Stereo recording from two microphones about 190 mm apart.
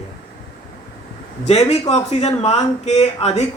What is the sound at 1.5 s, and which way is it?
Speech, 35° left (ahead or behind).